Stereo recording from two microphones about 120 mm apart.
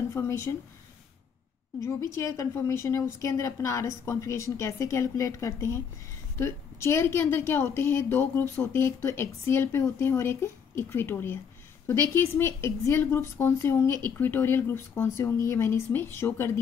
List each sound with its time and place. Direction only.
0.1 s a woman's voice: 20° left (ahead or behind)
1.8 s a woman's voice: 25° left (ahead or behind)